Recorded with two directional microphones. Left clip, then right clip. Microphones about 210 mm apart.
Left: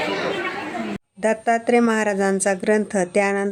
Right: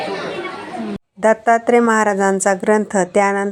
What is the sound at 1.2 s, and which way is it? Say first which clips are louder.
A woman's voice: right 6 dB; 10° right (ahead or behind).